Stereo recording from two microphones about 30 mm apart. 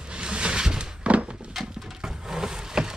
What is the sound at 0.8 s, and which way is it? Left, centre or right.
Thunk, right.